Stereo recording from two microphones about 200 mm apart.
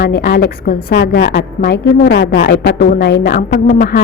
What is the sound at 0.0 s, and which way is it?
A woman's voice, 50° left (ahead or behind).